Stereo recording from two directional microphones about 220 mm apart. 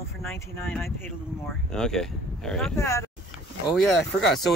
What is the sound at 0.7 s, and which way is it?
Speech, centre (ahead or behind).